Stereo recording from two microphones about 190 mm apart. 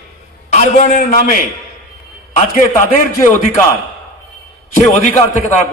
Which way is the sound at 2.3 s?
40° left (ahead or behind).